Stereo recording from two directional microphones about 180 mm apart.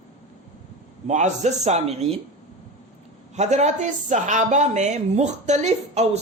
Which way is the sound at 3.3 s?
40° right (ahead or behind).